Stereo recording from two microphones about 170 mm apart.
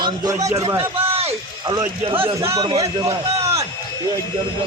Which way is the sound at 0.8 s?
35° right (ahead or behind).